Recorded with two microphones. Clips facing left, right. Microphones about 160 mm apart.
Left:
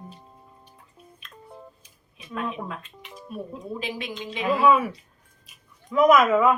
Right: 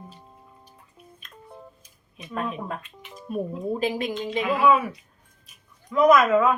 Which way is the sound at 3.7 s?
45° right (ahead or behind).